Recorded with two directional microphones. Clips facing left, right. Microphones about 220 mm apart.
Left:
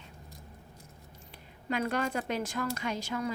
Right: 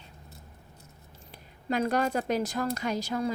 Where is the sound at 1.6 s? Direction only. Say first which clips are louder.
Right 4 dB; 35° right (ahead or behind).